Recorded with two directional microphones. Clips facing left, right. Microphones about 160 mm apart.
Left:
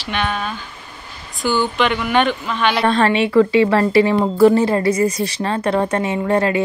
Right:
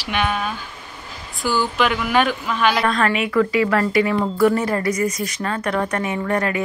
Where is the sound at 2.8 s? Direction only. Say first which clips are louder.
Left 4 dB; 30° left (ahead or behind).